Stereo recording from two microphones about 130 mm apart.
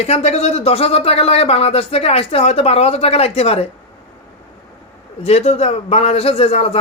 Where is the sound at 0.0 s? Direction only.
55° left (ahead or behind).